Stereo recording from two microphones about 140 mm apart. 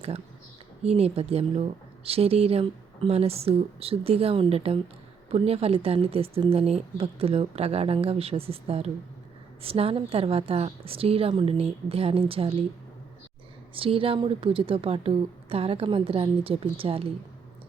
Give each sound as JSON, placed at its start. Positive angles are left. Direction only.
{"t": 0.9, "sound": "speech", "side_deg": -45}
{"t": 13.7, "sound": "a woman's voice", "side_deg": -40}